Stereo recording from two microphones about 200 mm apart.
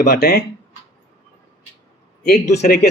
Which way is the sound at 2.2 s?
50° left (ahead or behind).